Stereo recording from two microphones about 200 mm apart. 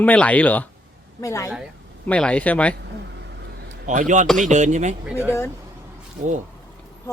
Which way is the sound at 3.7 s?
40° right (ahead or behind).